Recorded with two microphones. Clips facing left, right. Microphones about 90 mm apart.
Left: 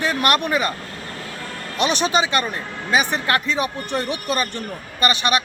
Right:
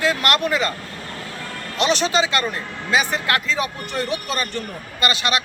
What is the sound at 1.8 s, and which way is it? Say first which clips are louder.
Speech: even; 15° left (ahead or behind).